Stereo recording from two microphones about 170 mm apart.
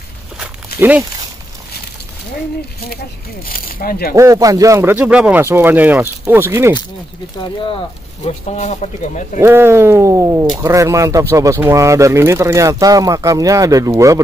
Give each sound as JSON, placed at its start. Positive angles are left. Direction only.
{"t": 0.7, "sound": "speech", "side_deg": -10}
{"t": 3.4, "sound": "speech", "side_deg": 55}
{"t": 4.1, "sound": "speech", "side_deg": -20}
{"t": 7.6, "sound": "speech", "side_deg": 35}
{"t": 9.4, "sound": "speech", "side_deg": -15}